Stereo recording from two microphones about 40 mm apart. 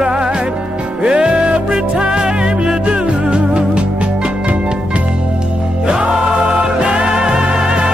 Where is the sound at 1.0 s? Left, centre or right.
Right.